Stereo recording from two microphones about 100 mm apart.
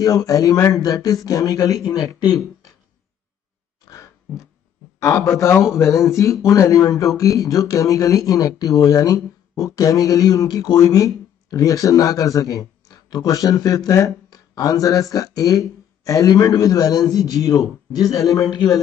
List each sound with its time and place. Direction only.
0.0 s speech: 35° left (ahead or behind)
3.8 s a sound: 35° left (ahead or behind)
5.0 s speech: 30° left (ahead or behind)